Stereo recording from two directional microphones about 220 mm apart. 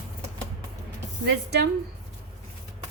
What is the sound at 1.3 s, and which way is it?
Speech, 50° right (ahead or behind).